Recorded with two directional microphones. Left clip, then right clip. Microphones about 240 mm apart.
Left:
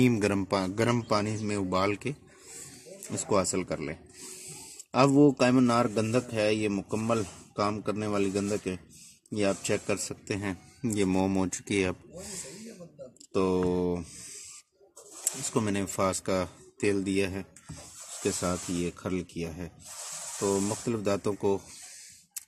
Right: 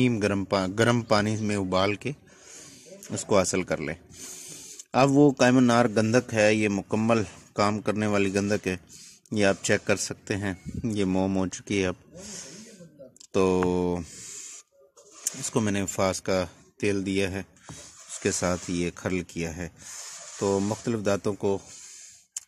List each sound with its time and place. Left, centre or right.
0.0 s a man's voice: centre
13.3 s speech: right
15.4 s a man's voice: right